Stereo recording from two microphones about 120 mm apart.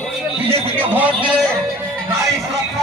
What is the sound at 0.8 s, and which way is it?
Speech, 15° right (ahead or behind).